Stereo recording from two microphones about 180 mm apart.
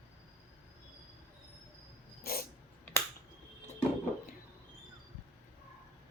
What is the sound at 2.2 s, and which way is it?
Dog, 55° left (ahead or behind).